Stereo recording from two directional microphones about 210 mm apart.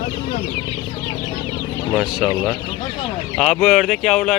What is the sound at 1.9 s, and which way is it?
Speech, centre (ahead or behind).